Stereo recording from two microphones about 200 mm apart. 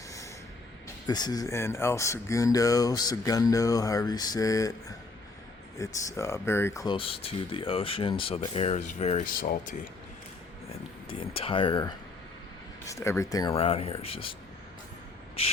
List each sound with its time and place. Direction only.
1.0 s speech: 20° left (ahead or behind); by 9.7 s 45° left (ahead or behind)
11.2 s speech: 25° left (ahead or behind)